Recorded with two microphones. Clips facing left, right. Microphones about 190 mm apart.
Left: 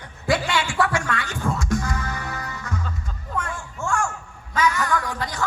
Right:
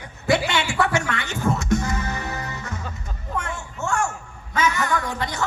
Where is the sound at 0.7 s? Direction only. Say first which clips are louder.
Even; 25° right (ahead or behind).